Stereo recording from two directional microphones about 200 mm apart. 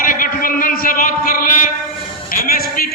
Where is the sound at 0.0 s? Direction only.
45° left (ahead or behind).